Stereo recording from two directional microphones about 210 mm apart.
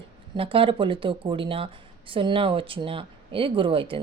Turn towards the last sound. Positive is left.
turn(degrees=-25)  # may be behind; listen again after turning